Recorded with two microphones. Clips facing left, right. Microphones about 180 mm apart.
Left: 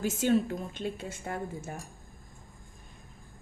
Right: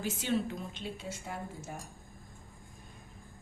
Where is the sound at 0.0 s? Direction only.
45° left (ahead or behind).